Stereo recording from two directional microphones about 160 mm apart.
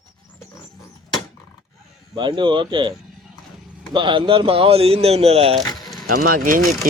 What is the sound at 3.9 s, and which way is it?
Speech, 30° right (ahead or behind).